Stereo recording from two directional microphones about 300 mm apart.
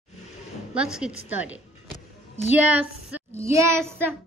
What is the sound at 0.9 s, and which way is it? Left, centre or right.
Speech, centre.